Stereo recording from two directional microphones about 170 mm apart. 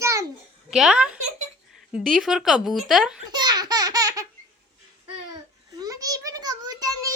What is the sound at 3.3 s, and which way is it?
Baby laughter, 25° right (ahead or behind).